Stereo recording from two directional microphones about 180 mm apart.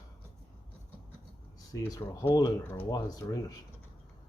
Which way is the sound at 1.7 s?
10° left (ahead or behind).